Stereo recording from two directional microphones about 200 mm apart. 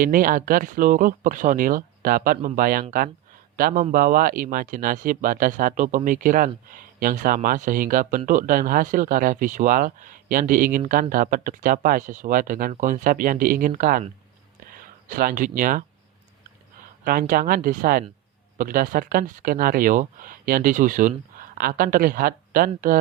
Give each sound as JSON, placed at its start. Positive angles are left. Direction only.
{"t": 0.0, "sound": "speech", "side_deg": -45}
{"t": 17.0, "sound": "speech", "side_deg": -45}